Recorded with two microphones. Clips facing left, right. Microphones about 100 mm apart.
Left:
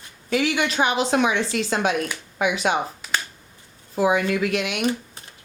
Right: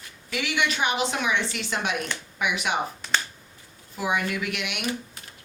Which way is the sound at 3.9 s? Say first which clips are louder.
Left 7 dB; 35° left (ahead or behind).